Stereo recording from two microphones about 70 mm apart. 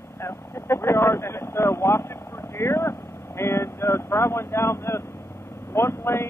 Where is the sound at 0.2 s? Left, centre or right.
Left.